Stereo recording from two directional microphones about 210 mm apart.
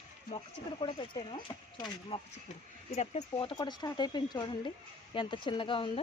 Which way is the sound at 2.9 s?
35° left (ahead or behind).